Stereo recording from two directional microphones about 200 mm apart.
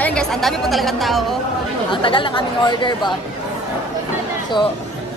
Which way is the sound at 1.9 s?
25° left (ahead or behind).